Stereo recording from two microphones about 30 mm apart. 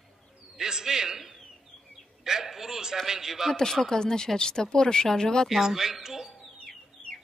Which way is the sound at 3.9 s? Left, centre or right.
Left.